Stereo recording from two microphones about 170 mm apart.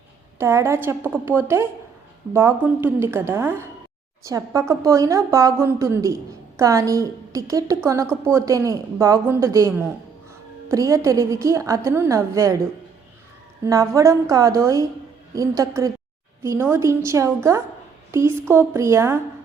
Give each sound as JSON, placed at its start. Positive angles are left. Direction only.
{"t": 0.3, "sound": "a woman's voice", "side_deg": -15}
{"t": 13.7, "sound": "a woman's voice", "side_deg": -20}